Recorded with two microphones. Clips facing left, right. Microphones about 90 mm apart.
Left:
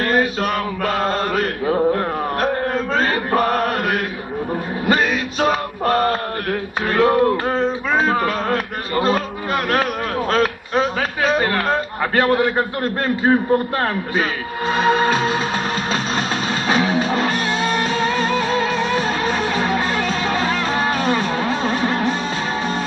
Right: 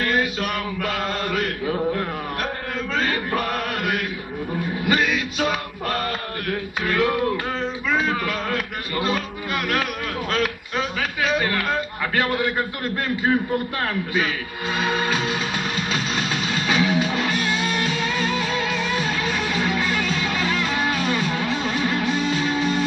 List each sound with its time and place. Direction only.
0.0 s mantra: 40° left (ahead or behind)
4.8 s male singing: 40° left (ahead or behind)
6.9 s music: 40° left (ahead or behind)
7.9 s a sound: 40° left (ahead or behind)
10.3 s a man's voice: 35° left (ahead or behind)
15.9 s music: 40° left (ahead or behind)